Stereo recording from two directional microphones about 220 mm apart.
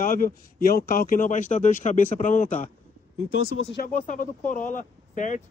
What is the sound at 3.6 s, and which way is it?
Speech, 50° left (ahead or behind).